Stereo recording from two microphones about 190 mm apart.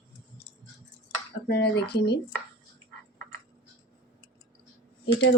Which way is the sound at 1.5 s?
60° left (ahead or behind).